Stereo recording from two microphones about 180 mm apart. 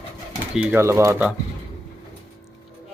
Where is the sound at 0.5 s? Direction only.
5° right (ahead or behind).